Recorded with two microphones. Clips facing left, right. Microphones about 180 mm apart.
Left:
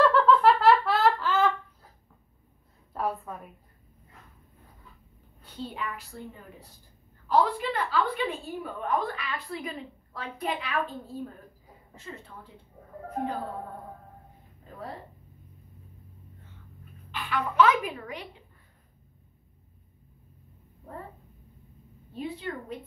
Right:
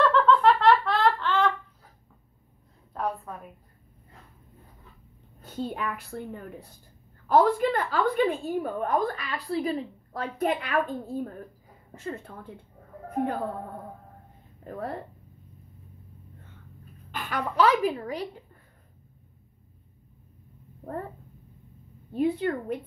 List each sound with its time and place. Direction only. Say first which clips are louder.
0.0 s giggle: even; 5° left (ahead or behind)
2.9 s a sound: even; centre (ahead or behind)
5.4 s a woman's voice: right 5 dB; 45° right (ahead or behind)
10.4 s a woman's voice: right 5 dB; 50° right (ahead or behind)
14.6 s speech: right 6 dB; 55° right (ahead or behind)
17.1 s a child's voice: even; 45° right (ahead or behind)
22.1 s a woman's voice: right 9 dB; 55° right (ahead or behind)